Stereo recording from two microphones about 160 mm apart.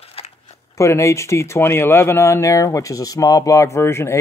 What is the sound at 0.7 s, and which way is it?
Speech, 20° left (ahead or behind).